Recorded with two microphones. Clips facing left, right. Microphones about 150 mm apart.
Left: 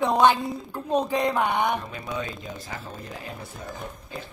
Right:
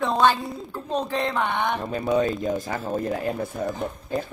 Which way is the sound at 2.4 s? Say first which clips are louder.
Right 10 dB; 45° right (ahead or behind).